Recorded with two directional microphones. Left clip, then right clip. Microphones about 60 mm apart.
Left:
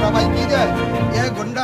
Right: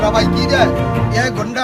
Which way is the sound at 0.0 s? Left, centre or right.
Right.